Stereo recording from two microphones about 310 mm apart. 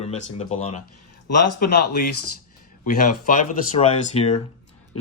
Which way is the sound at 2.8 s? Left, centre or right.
Left.